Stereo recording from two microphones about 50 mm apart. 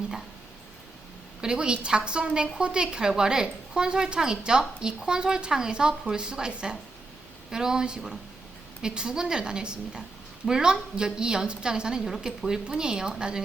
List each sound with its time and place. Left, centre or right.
1.4 s a woman's voice: centre